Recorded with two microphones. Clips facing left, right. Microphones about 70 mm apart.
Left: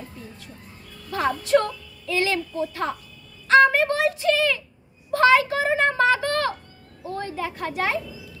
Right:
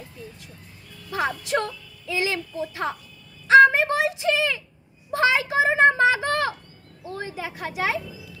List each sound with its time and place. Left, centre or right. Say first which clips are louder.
1.1 s speech: left 4 dB; centre
3.7 s a sound: left 1 dB; centre
7.2 s speech: left 3 dB; centre